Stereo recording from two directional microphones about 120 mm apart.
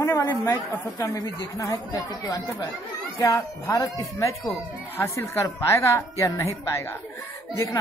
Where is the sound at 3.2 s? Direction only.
25° left (ahead or behind).